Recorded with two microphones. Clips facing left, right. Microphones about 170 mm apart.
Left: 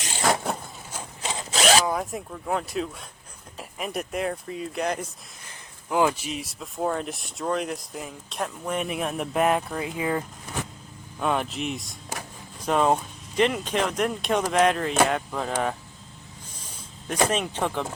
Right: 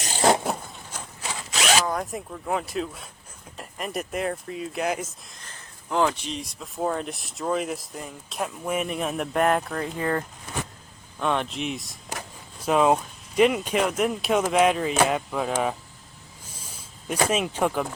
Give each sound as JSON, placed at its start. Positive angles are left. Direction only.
{"t": 0.0, "sound": "vehicle", "side_deg": -35}
{"t": 0.4, "sound": "a sound", "side_deg": 0}
{"t": 1.2, "sound": "zipper", "side_deg": 25}
{"t": 1.9, "sound": "speech", "side_deg": 0}
{"t": 5.4, "sound": "speech", "side_deg": 10}
{"t": 17.1, "sound": "speech", "side_deg": -10}